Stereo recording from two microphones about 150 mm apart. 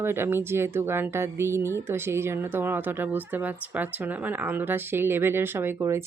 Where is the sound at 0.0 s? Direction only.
15° right (ahead or behind).